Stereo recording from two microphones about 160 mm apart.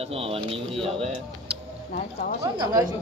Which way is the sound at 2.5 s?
25° right (ahead or behind).